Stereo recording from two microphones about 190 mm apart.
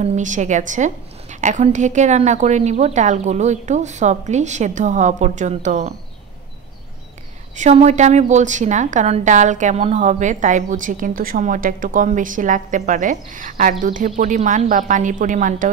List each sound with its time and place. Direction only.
0.0 s a woman's voice: 40° right (ahead or behind)
7.5 s a woman's voice: 40° right (ahead or behind)